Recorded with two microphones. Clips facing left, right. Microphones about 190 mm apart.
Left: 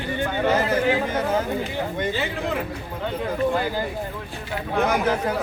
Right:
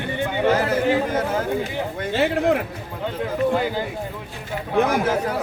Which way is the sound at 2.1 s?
65° right (ahead or behind).